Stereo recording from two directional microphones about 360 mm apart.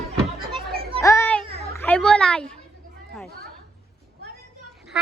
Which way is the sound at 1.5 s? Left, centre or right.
Centre.